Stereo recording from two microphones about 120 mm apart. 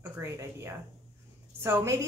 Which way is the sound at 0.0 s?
25° right (ahead or behind).